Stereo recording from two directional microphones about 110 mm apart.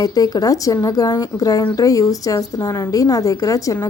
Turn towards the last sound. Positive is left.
turn(degrees=30)  # may be behind; listen again after turning